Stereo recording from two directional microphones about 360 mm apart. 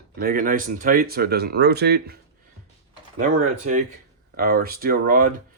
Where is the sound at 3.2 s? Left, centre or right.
Right.